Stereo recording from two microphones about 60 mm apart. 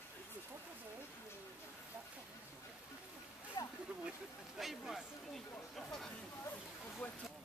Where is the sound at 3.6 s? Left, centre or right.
Left.